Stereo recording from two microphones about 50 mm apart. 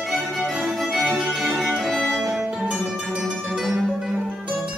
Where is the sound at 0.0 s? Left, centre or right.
Centre.